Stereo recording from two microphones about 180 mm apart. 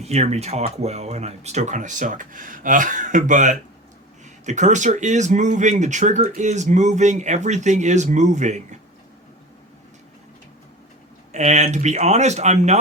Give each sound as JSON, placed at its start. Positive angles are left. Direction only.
{"t": 0.0, "sound": "speech", "side_deg": -35}
{"t": 11.3, "sound": "speech", "side_deg": -40}